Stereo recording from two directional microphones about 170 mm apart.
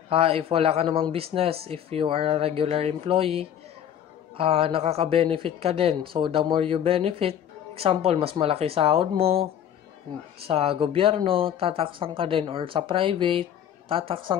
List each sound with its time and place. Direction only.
0.1 s speech: 35° right (ahead or behind)
10.5 s speech: 35° right (ahead or behind)